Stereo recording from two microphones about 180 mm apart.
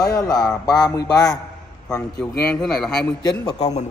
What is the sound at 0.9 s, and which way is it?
Speech, 20° left (ahead or behind).